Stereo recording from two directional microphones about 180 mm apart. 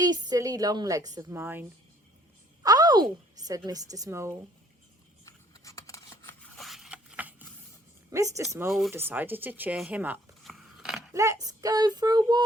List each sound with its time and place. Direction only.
0.0 s a woman's voice: 20° right (ahead or behind)
2.6 s a woman's voice: 20° right (ahead or behind)
5.2 s scissors: 20° left (ahead or behind)
6.6 s a sound: centre (ahead or behind)
8.1 s speech: 15° right (ahead or behind); by 11.1 s centre (ahead or behind)
11.1 s a woman's voice: 15° right (ahead or behind)